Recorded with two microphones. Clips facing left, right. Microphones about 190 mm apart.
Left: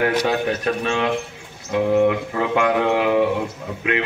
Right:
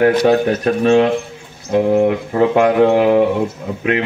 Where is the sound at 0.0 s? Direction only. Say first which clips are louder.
Right 7 dB; 35° right (ahead or behind).